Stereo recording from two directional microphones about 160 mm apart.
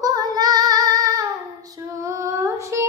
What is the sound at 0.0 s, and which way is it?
Child singing, 25° right (ahead or behind).